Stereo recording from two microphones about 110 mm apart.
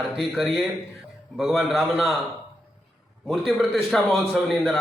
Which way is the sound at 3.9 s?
5° left (ahead or behind).